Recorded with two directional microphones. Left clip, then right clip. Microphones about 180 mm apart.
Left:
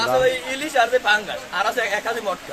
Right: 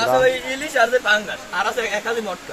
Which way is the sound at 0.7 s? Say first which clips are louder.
Right 1 dB; 55° left (ahead or behind).